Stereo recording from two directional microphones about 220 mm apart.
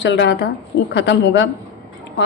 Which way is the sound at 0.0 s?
55° left (ahead or behind).